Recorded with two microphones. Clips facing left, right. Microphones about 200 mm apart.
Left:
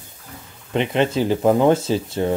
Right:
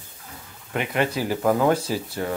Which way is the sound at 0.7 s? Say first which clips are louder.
Left 5 dB; 25° left (ahead or behind).